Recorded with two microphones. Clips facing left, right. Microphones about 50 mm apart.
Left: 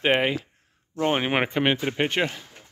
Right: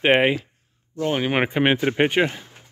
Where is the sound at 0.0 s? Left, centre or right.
Right.